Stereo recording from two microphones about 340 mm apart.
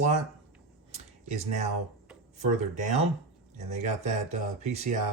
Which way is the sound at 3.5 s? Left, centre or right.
Right.